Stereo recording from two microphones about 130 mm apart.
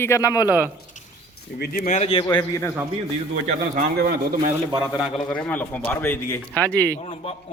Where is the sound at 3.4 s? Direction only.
80° right.